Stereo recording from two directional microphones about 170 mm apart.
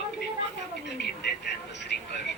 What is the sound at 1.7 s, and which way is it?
Vehicle, 90° left.